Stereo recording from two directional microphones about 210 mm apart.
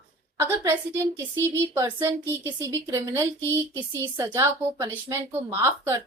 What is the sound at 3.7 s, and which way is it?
Speech, 10° left (ahead or behind).